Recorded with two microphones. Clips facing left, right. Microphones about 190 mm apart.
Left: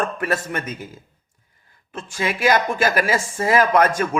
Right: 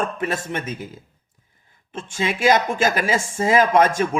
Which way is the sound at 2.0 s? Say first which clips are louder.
Right 1 dB; 30° right (ahead or behind).